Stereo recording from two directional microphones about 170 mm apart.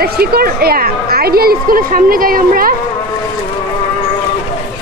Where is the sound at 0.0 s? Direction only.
65° right (ahead or behind).